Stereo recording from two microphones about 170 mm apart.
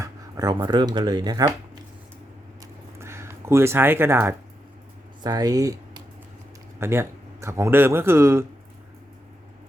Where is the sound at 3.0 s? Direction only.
15° right (ahead or behind).